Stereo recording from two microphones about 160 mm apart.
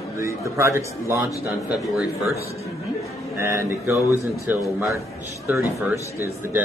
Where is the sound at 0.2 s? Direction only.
15° right (ahead or behind).